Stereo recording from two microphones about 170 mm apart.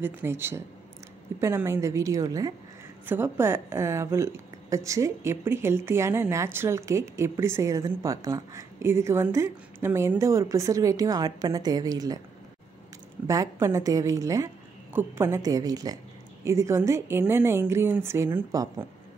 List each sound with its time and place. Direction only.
0.0 s a woman's voice: 15° right (ahead or behind)
13.3 s a woman's voice: 20° right (ahead or behind)